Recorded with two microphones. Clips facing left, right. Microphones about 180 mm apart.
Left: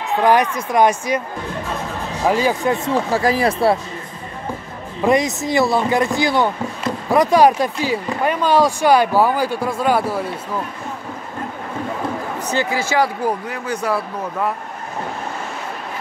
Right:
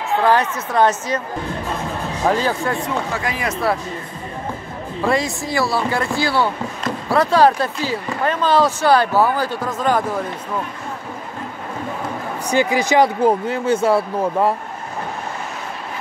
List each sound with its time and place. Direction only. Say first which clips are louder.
0.2 s speech: left 3 dB; 15° left (ahead or behind)
2.2 s speech: left 2 dB; 10° left (ahead or behind)
2.9 s speech: left 6 dB; 35° left (ahead or behind)
5.0 s speech: left 4 dB; 20° left (ahead or behind)
12.4 s speech: right 4 dB; 15° right (ahead or behind)